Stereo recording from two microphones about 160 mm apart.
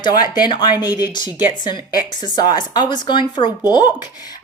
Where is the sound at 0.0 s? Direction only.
25° left (ahead or behind).